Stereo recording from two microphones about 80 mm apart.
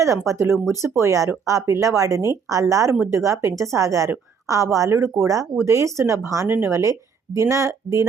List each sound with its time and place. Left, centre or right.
0.3 s speech: right